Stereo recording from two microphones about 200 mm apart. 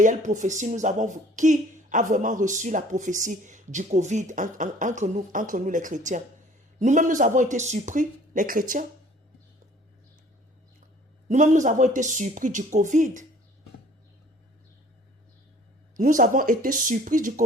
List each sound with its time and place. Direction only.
0.0 s speech: 40° right (ahead or behind)
11.3 s speech: 35° right (ahead or behind)
16.0 s speech: 40° right (ahead or behind)